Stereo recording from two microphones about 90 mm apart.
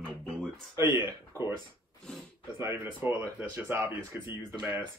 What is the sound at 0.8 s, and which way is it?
Speech, 55° left (ahead or behind).